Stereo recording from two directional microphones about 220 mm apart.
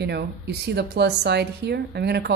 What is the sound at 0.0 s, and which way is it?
Speech, 50° right (ahead or behind).